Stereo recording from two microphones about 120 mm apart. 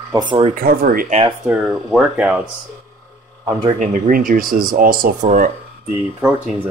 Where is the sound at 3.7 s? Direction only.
90° right.